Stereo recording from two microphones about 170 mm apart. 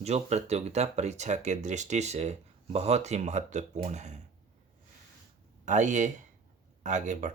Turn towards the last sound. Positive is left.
turn(degrees=-45)  # may be behind; listen again after turning